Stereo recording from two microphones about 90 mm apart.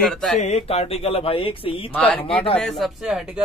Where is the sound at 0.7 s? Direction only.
90° left.